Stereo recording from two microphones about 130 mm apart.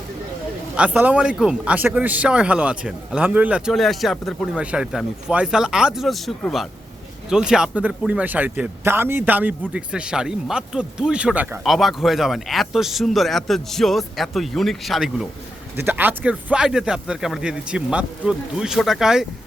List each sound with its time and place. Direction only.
0.8 s a man's voice: 10° right (ahead or behind)
3.7 s a man's voice: centre (ahead or behind)
15.7 s speech: 15° right (ahead or behind)